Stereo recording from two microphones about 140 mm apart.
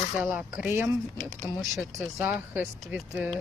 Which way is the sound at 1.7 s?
Centre (ahead or behind).